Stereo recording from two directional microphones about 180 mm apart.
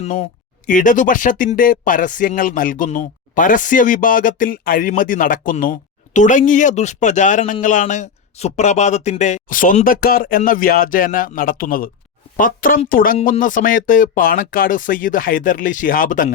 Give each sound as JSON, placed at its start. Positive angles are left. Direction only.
{"t": 0.0, "sound": "a man's voice", "side_deg": 45}